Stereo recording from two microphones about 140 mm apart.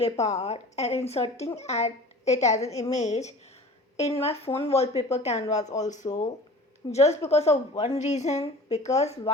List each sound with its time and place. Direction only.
0.0 s a woman's voice: 50° left (ahead or behind)